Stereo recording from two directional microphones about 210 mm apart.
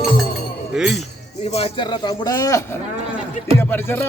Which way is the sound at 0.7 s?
Centre (ahead or behind).